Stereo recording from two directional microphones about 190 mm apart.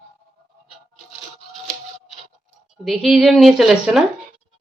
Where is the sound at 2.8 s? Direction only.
Centre (ahead or behind).